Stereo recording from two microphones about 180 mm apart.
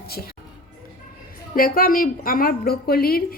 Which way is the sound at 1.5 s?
55° left (ahead or behind).